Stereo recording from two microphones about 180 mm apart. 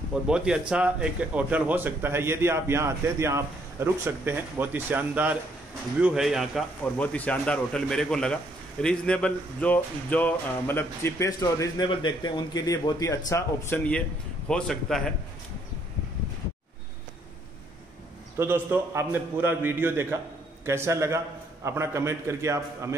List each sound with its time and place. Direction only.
0.3 s a man's voice: 5° right (ahead or behind)
18.4 s a man's voice: 10° right (ahead or behind)